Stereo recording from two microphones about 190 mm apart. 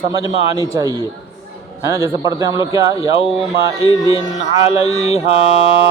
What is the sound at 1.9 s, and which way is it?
A man's voice, 15° right (ahead or behind).